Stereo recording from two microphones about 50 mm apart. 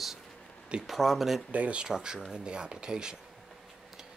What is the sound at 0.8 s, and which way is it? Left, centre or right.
Speech, centre.